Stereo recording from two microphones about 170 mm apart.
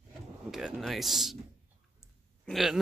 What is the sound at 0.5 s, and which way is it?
Speech, centre (ahead or behind).